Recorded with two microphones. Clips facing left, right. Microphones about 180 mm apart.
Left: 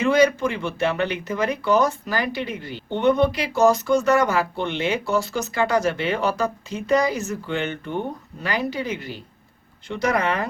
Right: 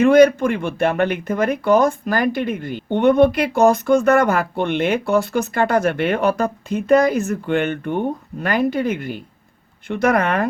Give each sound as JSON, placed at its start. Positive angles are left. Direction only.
{"t": 0.0, "sound": "speech", "side_deg": -55}